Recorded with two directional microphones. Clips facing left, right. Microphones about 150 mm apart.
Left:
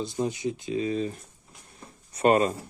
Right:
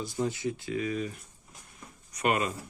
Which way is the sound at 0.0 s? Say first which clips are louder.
Left 3 dB; 20° left (ahead or behind).